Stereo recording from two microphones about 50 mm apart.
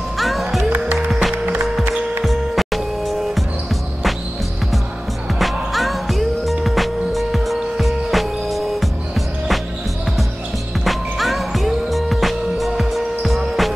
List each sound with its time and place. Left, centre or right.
0.2 s music: centre
0.7 s music: right
0.9 s music: centre
5.4 s music: centre
10.8 s music: centre